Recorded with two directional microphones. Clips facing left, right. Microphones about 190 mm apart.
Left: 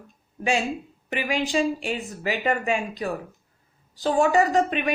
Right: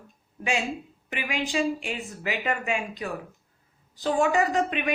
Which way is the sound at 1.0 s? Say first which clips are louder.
Left 5 dB; 35° left (ahead or behind).